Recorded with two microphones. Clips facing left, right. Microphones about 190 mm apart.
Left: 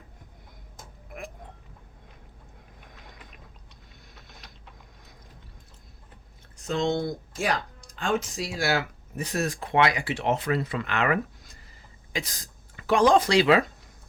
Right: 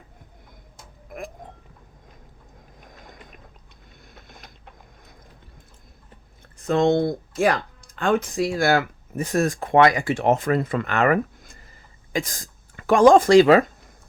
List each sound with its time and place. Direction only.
2.8 s mechanisms: 45° right (ahead or behind)
4.1 s a sound: 50° right (ahead or behind)
6.6 s speech: 55° right (ahead or behind)